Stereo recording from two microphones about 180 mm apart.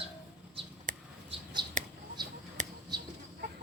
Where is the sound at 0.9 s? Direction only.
50° right (ahead or behind).